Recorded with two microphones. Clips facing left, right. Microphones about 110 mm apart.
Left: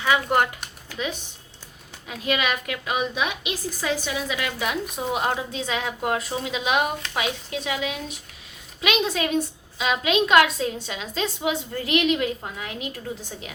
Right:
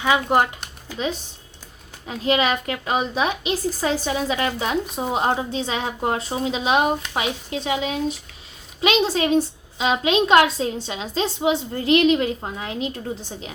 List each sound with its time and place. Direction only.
0.0 s speech: 25° right (ahead or behind)
2.0 s a woman's voice: 30° right (ahead or behind)